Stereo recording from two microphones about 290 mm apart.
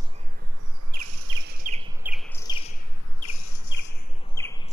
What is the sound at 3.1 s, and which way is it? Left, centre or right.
Chirp, left.